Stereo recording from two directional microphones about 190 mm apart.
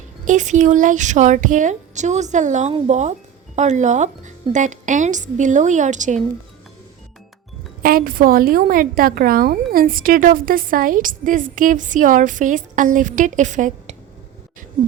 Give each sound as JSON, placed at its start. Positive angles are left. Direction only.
{"t": 0.3, "sound": "a woman's voice", "side_deg": -40}
{"t": 7.8, "sound": "a woman's voice", "side_deg": -50}